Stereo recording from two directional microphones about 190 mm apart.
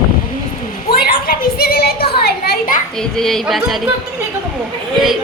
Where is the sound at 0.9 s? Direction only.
50° left (ahead or behind).